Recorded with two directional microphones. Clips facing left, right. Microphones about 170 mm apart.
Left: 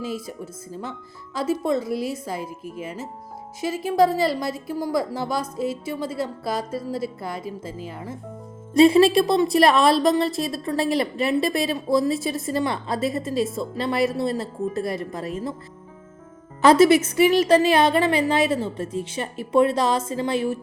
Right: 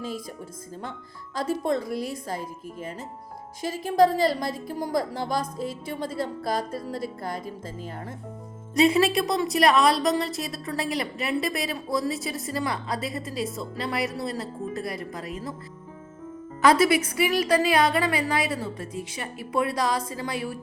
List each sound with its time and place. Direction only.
0.0 s a woman's voice: 5° left (ahead or behind)
1.5 s a woman's voice: 5° left (ahead or behind)
3.8 s a woman's voice: 45° right (ahead or behind)
5.4 s a woman's voice: 5° left (ahead or behind)
6.4 s a woman's voice: 50° right (ahead or behind)
6.7 s a woman's voice: 5° left (ahead or behind)
7.2 s a woman's voice: 45° right (ahead or behind)
8.7 s a woman's voice: 30° left (ahead or behind)
16.6 s a woman's voice: 25° left (ahead or behind)